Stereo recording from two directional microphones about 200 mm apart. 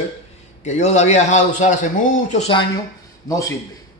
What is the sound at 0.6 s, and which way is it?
A man's voice, 35° left (ahead or behind).